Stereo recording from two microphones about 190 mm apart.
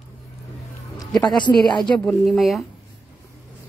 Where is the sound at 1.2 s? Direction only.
25° left (ahead or behind).